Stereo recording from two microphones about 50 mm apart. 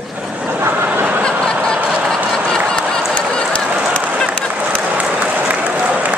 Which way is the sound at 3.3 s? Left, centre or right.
Centre.